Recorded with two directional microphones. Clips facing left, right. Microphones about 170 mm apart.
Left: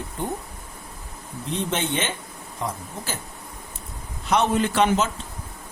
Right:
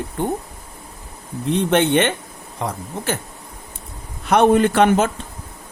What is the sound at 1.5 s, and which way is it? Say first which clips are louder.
Speech: right 9 dB; 65° right (ahead or behind).